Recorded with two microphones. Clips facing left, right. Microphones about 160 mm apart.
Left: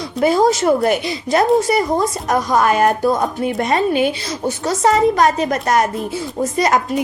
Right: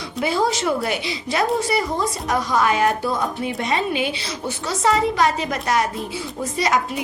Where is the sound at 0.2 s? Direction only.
45° left (ahead or behind).